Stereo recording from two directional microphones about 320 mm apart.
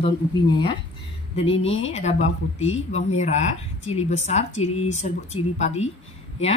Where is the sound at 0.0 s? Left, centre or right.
Centre.